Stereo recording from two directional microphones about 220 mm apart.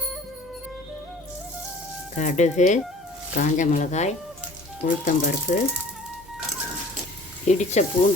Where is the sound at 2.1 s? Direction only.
30° left (ahead or behind).